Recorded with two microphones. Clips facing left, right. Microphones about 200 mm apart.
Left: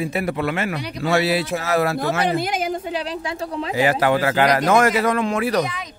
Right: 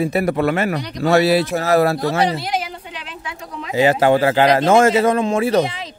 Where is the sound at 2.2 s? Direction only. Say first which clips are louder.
Left 1 dB; 50° left (ahead or behind).